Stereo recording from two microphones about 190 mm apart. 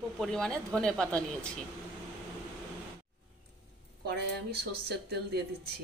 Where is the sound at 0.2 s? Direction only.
5° left (ahead or behind).